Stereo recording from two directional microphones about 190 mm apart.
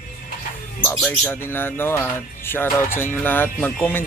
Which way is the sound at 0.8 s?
10° left (ahead or behind).